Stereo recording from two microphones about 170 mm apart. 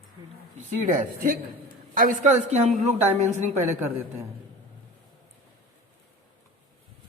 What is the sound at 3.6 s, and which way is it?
Speech, 15° right (ahead or behind).